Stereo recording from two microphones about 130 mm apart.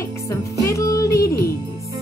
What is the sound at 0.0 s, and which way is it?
Music, 25° left (ahead or behind).